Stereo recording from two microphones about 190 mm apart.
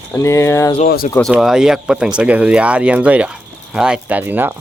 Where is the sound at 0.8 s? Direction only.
50° left (ahead or behind).